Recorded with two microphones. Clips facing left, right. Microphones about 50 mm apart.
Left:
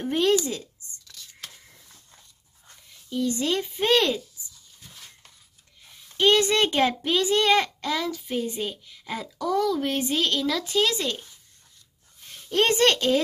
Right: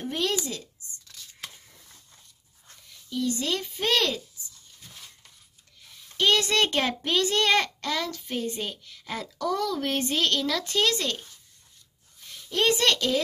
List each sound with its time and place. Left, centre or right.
0.0 s speech: left
3.2 s a child's voice: left
6.1 s a child's voice: left
12.4 s a woman's voice: left